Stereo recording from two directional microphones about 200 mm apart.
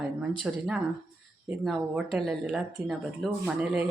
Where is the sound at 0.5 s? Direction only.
5° right (ahead or behind).